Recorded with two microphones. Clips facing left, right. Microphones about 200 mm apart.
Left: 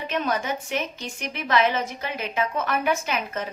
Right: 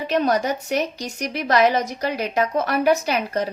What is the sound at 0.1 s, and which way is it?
A woman's voice, 35° right (ahead or behind).